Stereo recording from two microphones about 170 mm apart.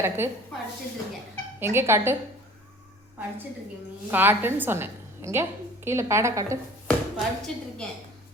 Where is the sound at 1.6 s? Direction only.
15° right (ahead or behind).